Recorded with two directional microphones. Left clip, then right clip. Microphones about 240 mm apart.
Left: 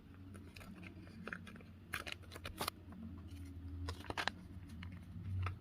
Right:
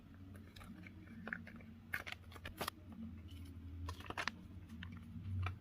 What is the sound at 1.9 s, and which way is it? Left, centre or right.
Scissors, centre.